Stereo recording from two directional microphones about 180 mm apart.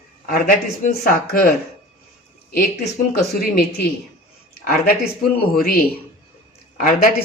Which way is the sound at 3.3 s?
60° left (ahead or behind).